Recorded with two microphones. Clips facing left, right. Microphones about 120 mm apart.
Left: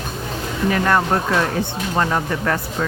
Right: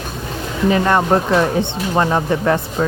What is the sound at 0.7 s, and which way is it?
Speech, 20° right (ahead or behind).